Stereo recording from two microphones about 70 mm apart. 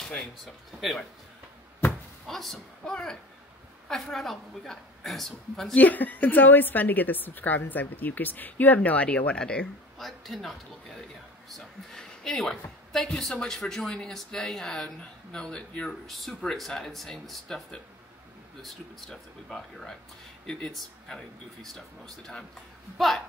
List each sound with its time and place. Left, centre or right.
0.7 s speech: centre
2.2 s speech: centre
5.8 s a woman's voice: left
9.9 s speech: centre
15.9 s speech: centre